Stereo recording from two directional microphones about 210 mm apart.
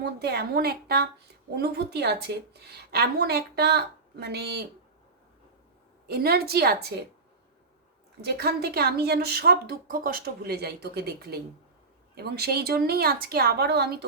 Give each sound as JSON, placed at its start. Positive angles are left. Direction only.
{"t": 0.0, "sound": "a woman's voice", "side_deg": -50}
{"t": 6.1, "sound": "a woman's voice", "side_deg": -50}
{"t": 8.2, "sound": "a woman's voice", "side_deg": -50}